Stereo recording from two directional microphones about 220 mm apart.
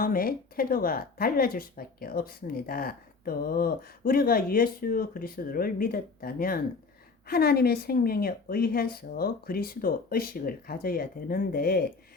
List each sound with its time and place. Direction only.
0.0 s a woman's voice: 40° left (ahead or behind)